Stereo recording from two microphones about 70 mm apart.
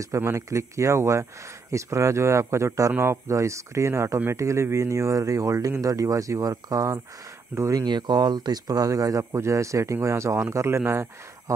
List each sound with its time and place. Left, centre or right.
0.2 s speech: right
7.5 s speech: right
7.8 s speech: right